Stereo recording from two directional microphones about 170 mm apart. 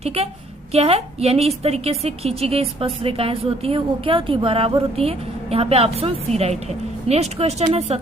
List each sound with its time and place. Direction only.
0.0 s a woman's voice: 35° right (ahead or behind)